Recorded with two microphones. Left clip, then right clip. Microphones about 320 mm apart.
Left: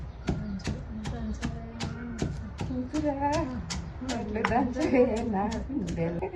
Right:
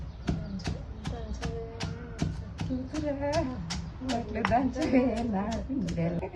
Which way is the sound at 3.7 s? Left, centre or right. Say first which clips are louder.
Right 1 dB; centre.